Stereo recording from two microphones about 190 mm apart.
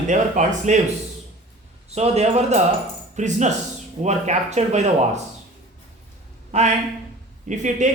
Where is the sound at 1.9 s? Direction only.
35° right (ahead or behind).